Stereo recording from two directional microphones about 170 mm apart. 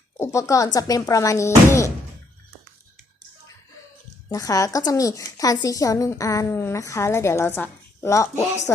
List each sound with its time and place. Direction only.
0.2 s a woman's voice: 20° left (ahead or behind)
4.3 s a woman's voice: 20° left (ahead or behind)